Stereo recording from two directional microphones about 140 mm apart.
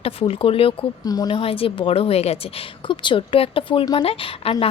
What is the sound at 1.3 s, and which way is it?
Speech, 40° left (ahead or behind).